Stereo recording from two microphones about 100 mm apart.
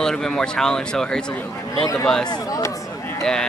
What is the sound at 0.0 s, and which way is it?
Speech, 5° left (ahead or behind).